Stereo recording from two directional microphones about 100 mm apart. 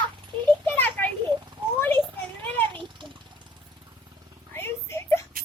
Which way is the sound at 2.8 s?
55° right (ahead or behind).